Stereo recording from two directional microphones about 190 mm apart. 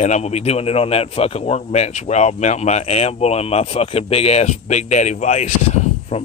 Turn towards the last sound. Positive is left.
turn(degrees=35)  # may be behind; listen again after turning